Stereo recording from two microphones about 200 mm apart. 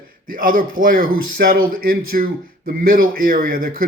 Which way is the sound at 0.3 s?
45° right (ahead or behind).